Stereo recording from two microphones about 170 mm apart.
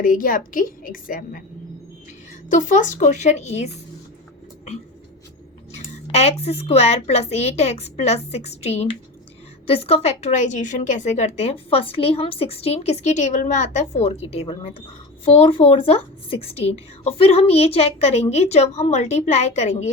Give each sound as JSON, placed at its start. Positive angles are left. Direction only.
{"t": 0.0, "sound": "a woman's voice", "side_deg": 55}
{"t": 2.5, "sound": "a woman's voice", "side_deg": 45}
{"t": 5.7, "sound": "a woman's voice", "side_deg": 40}